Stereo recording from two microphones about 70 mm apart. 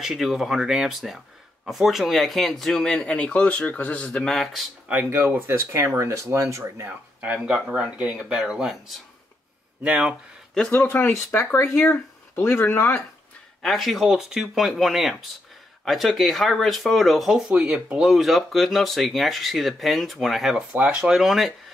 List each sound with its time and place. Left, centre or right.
0.0 s speech: centre
5.1 s speech: right
7.2 s speech: centre
9.8 s speech: centre
10.9 s speech: left
13.6 s speech: centre
17.5 s speech: centre
17.9 s speech: centre
20.7 s speech: centre